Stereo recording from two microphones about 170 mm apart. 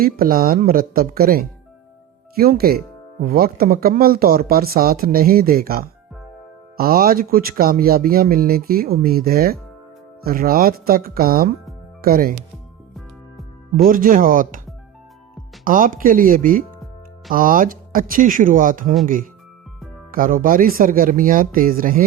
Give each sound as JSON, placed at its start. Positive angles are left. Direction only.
{"t": 0.0, "sound": "speech", "side_deg": -60}
{"t": 12.9, "sound": "music", "side_deg": 0}
{"t": 13.8, "sound": "speech", "side_deg": -55}
{"t": 15.6, "sound": "speech", "side_deg": -55}
{"t": 20.1, "sound": "speech", "side_deg": -55}